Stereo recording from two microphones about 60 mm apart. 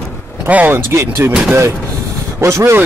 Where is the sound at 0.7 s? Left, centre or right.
Right.